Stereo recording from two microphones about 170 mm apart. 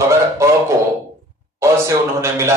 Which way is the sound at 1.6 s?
15° right (ahead or behind).